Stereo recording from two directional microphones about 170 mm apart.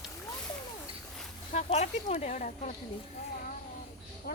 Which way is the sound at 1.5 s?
40° left (ahead or behind).